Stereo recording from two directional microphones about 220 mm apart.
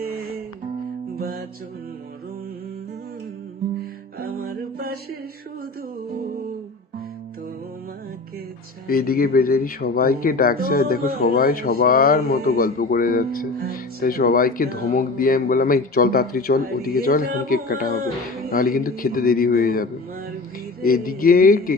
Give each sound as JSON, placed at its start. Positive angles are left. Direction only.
{"t": 1.2, "sound": "music", "side_deg": -40}
{"t": 4.2, "sound": "music", "side_deg": -45}
{"t": 8.9, "sound": "speech", "side_deg": 40}